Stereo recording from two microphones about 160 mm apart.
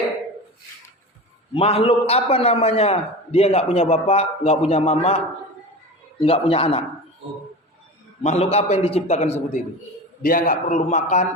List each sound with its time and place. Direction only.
1.5 s a man's voice: 35° left (ahead or behind)
8.2 s a man's voice: 40° left (ahead or behind)
10.2 s a man's voice: 60° left (ahead or behind)